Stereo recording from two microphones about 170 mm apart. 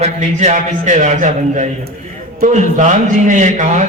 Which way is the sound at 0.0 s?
45° right (ahead or behind).